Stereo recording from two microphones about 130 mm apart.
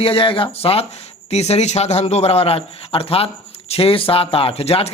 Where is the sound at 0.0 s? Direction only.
45° left (ahead or behind).